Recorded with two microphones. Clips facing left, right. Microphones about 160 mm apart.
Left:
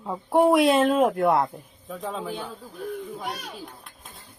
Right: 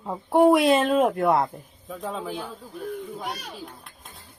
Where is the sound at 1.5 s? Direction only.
Centre (ahead or behind).